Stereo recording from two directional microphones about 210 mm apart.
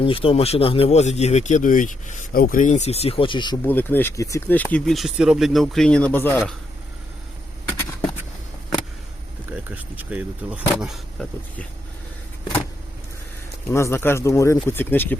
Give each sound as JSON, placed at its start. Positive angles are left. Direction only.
{"t": 0.0, "sound": "speech", "side_deg": 25}
{"t": 3.7, "sound": "speech", "side_deg": 10}
{"t": 9.5, "sound": "speech", "side_deg": -10}
{"t": 13.7, "sound": "speech", "side_deg": 15}